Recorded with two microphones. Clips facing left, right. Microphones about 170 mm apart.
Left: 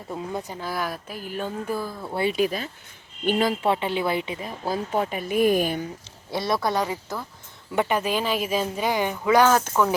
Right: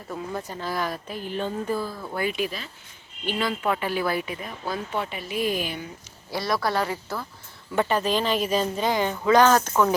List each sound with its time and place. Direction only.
0.1 s speech: 15° left (ahead or behind)
2.4 s speech: 45° left (ahead or behind)
3.6 s speech: 25° left (ahead or behind)
4.6 s speech: 40° left (ahead or behind)
6.3 s speech: 25° left (ahead or behind)